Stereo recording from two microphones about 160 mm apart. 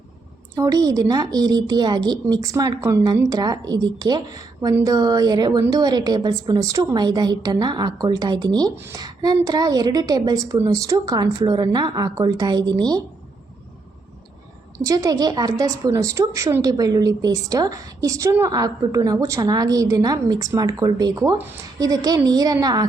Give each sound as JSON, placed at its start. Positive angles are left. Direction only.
{"t": 0.5, "sound": "a woman's voice", "side_deg": -20}
{"t": 14.8, "sound": "a woman's voice", "side_deg": -20}